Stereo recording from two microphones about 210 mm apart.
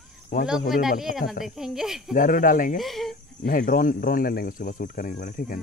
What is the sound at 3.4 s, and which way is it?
Speech, 40° left (ahead or behind).